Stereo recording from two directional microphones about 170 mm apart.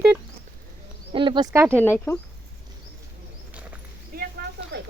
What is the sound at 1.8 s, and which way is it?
Speech, 10° left (ahead or behind).